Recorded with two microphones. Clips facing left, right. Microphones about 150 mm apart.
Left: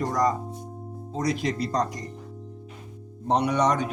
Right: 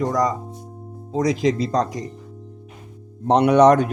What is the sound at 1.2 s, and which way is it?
Speech, 90° right.